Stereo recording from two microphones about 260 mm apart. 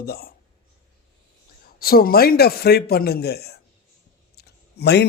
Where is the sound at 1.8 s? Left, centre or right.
Left.